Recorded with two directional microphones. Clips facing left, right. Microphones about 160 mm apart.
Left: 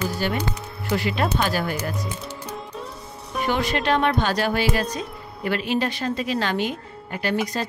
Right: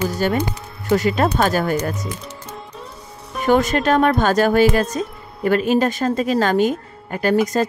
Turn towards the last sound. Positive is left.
turn(degrees=-45)  # may be behind; listen again after turning